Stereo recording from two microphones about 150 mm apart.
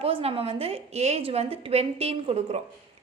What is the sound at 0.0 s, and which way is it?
A woman's voice, 40° right (ahead or behind).